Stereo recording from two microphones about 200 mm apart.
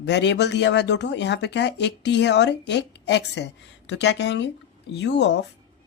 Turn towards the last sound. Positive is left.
turn(degrees=60)  # may be behind; listen again after turning